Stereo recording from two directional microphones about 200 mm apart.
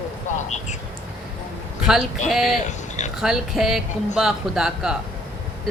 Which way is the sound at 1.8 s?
Centre (ahead or behind).